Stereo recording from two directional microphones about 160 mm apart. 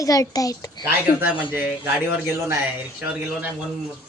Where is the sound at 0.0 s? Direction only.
20° left (ahead or behind).